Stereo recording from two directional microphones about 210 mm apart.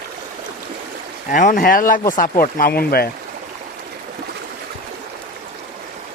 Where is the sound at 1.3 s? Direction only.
40° left (ahead or behind).